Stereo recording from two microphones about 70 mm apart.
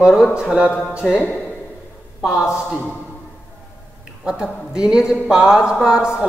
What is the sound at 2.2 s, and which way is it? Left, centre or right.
Speech, centre.